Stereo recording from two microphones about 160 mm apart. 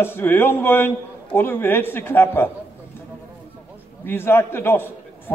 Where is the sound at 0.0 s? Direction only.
15° left (ahead or behind).